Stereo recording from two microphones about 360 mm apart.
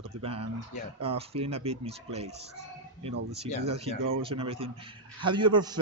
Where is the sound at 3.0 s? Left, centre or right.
Centre.